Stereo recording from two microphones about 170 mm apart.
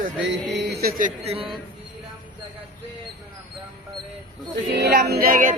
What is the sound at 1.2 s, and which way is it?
Speech, 35° right (ahead or behind).